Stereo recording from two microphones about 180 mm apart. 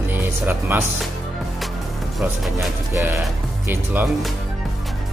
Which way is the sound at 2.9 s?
15° right (ahead or behind).